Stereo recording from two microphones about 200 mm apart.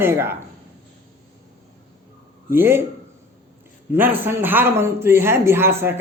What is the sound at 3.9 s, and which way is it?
A man's voice, 10° right (ahead or behind).